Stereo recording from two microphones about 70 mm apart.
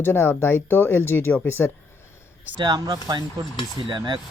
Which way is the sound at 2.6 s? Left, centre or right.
Right.